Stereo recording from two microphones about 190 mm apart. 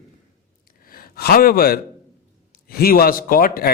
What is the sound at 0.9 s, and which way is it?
A man's voice, 50° left (ahead or behind).